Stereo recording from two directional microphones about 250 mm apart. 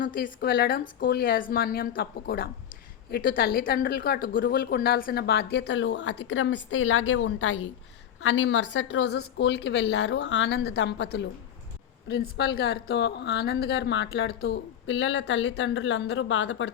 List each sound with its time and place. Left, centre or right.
0.0 s a woman's voice: left